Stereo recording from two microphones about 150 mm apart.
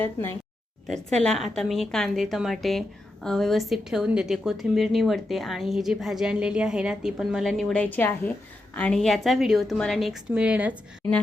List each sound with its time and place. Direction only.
0.9 s a woman's voice: 5° left (ahead or behind)